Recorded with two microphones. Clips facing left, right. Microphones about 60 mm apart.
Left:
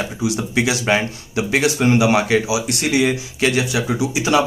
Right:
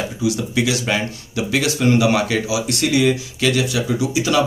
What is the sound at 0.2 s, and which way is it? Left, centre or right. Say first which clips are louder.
Speech: even; left.